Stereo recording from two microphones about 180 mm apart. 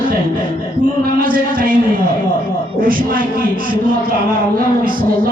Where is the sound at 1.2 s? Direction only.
50° right (ahead or behind).